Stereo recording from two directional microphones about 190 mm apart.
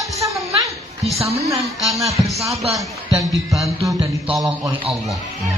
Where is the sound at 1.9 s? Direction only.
15° right (ahead or behind).